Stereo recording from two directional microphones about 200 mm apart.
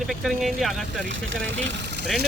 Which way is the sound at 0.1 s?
Centre (ahead or behind).